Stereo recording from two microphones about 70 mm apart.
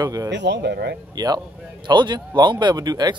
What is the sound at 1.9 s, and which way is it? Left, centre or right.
Speech, right.